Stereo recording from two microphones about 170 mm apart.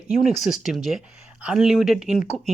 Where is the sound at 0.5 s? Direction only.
Centre (ahead or behind).